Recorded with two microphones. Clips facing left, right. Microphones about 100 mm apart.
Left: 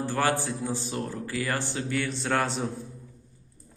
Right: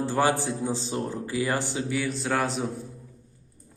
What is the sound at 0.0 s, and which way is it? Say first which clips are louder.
Speech: right 2 dB; 15° right (ahead or behind).